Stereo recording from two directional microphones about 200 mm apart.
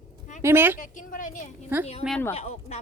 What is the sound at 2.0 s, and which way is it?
Speech, centre (ahead or behind).